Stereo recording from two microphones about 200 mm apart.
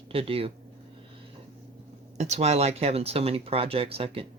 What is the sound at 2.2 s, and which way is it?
Speech, 35° right (ahead or behind).